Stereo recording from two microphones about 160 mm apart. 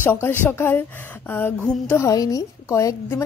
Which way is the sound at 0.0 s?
15° left (ahead or behind).